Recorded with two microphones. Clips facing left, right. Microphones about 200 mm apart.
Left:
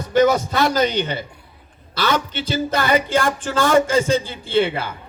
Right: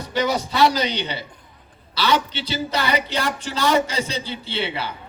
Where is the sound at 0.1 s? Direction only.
50° left (ahead or behind).